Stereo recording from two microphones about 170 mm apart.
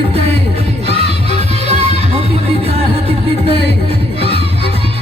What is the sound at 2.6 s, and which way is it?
Music, 35° right (ahead or behind).